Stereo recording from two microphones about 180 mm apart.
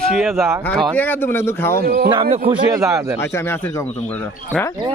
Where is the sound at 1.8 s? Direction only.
55° right (ahead or behind).